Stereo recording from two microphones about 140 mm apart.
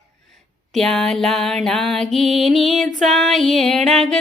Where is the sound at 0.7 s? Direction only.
5° left (ahead or behind).